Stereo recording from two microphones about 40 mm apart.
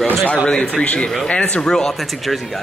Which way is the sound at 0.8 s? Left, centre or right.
Left.